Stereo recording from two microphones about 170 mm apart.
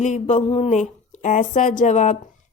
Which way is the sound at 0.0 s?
45° left (ahead or behind).